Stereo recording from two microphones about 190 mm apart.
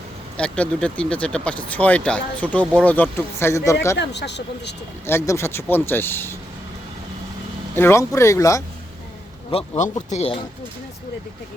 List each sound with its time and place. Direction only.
0.3 s speech: 5° left (ahead or behind)
3.9 s speech: 65° left (ahead or behind)
5.0 s speech: 15° left (ahead or behind)
7.8 s speech: 15° left (ahead or behind)
9.5 s speech: 35° left (ahead or behind)